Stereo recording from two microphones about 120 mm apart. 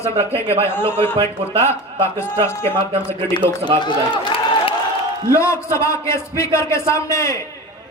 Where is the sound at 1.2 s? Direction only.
55° right (ahead or behind).